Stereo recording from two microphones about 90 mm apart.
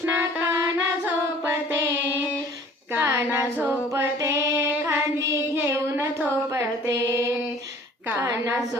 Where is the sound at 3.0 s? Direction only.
35° right (ahead or behind).